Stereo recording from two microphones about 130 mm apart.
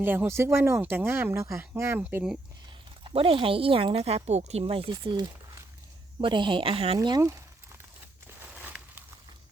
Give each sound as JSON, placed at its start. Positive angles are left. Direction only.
{"t": 0.0, "sound": "speech", "side_deg": -15}
{"t": 3.0, "sound": "speech", "side_deg": -45}
{"t": 8.5, "sound": "a sound", "side_deg": -10}